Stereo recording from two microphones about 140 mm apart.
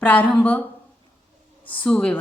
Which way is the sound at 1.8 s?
5° left (ahead or behind).